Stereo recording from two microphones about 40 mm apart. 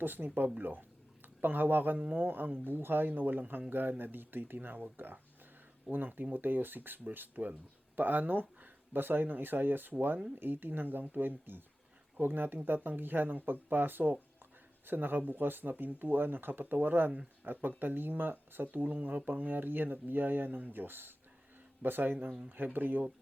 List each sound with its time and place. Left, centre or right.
0.0 s speech: right
5.9 s speech: centre
6.3 s speech: right